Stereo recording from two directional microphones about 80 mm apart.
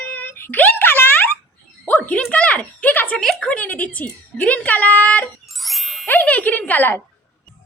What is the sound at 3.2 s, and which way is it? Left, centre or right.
A woman's voice, centre.